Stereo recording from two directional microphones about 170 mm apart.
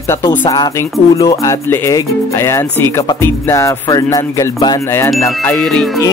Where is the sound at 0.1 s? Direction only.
15° left (ahead or behind).